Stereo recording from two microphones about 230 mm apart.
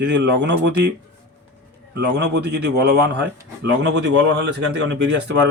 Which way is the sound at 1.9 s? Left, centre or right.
Right.